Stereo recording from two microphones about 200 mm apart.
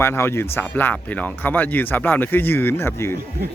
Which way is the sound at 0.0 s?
10° left (ahead or behind).